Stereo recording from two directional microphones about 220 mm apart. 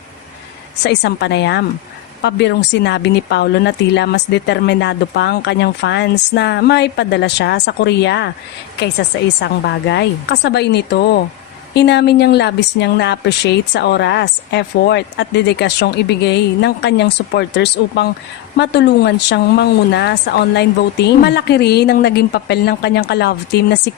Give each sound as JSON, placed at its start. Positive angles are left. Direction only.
{"t": 0.9, "sound": "speech", "side_deg": 50}